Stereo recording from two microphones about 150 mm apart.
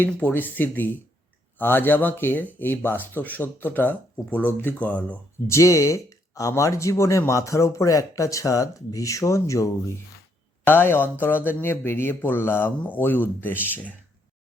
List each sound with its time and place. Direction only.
0.0 s speech: 10° left (ahead or behind)
5.5 s speech: 20° left (ahead or behind)